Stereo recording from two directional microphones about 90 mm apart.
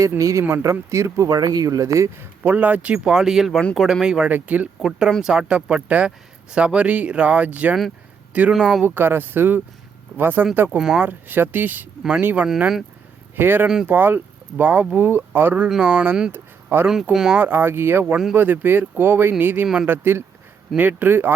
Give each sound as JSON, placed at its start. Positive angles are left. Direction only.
{"t": 0.2, "sound": "speech", "side_deg": -35}
{"t": 1.4, "sound": "speech", "side_deg": -45}
{"t": 2.4, "sound": "speech", "side_deg": -20}
{"t": 3.0, "sound": "speech", "side_deg": -5}
{"t": 4.8, "sound": "speech", "side_deg": -5}
{"t": 8.5, "sound": "speech", "side_deg": -5}
{"t": 8.8, "sound": "speech", "side_deg": -25}
{"t": 10.8, "sound": "speech", "side_deg": -5}
{"t": 11.0, "sound": "speech", "side_deg": -20}
{"t": 16.3, "sound": "a sound", "side_deg": -25}
{"t": 16.8, "sound": "speech", "side_deg": -10}
{"t": 17.3, "sound": "speech", "side_deg": -25}
{"t": 19.6, "sound": "speech", "side_deg": -5}
{"t": 19.9, "sound": "speech", "side_deg": -25}